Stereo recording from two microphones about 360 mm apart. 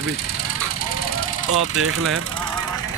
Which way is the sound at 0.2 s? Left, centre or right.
Left.